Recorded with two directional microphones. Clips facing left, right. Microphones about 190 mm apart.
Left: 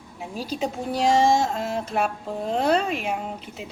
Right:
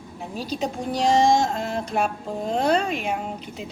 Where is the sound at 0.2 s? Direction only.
10° left (ahead or behind).